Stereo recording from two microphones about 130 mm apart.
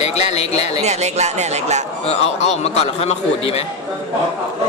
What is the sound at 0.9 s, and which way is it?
Speech, 60° right (ahead or behind).